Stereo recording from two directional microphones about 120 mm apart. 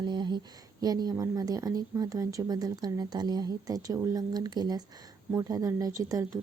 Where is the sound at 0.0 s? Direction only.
40° right (ahead or behind).